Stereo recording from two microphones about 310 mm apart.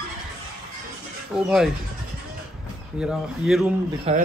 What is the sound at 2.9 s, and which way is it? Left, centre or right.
Speech, centre.